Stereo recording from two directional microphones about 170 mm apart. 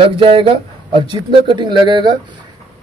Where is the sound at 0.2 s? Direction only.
30° right (ahead or behind).